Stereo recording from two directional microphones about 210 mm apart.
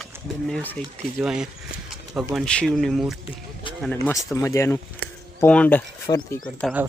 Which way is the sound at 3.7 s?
25° left (ahead or behind).